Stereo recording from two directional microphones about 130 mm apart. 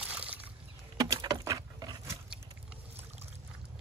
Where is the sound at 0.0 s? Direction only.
10° right (ahead or behind).